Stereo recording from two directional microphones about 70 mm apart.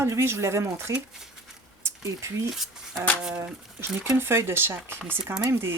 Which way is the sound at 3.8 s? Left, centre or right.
Right.